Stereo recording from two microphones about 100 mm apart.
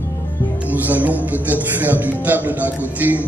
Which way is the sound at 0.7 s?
15° right (ahead or behind).